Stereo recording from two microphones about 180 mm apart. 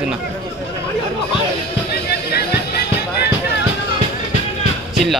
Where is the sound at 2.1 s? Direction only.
60° left (ahead or behind).